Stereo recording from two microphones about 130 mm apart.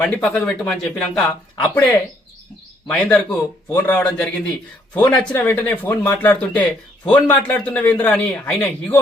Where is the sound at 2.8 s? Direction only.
5° left (ahead or behind).